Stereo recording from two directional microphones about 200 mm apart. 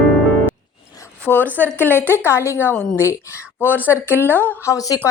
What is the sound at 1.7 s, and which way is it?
A woman's voice, 10° left (ahead or behind).